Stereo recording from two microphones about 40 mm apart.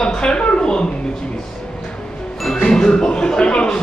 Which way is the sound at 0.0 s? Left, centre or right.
Centre.